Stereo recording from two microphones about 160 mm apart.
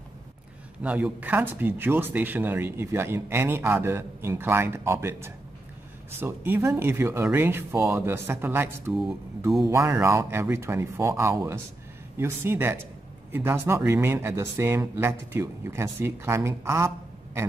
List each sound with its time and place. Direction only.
0.8 s speech: 10° right (ahead or behind)